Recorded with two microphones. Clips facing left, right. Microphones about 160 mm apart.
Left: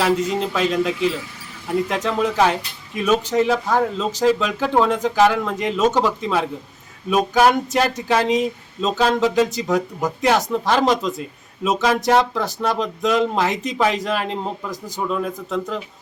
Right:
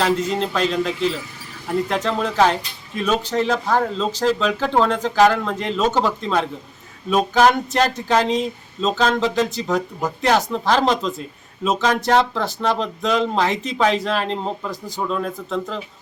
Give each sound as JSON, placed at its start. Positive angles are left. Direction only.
{"t": 0.0, "sound": "speech", "side_deg": 5}